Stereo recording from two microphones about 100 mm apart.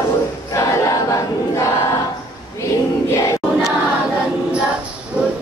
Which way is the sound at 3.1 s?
30° left (ahead or behind).